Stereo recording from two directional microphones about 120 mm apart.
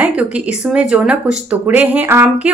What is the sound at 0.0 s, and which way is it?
A woman's voice, 10° right (ahead or behind).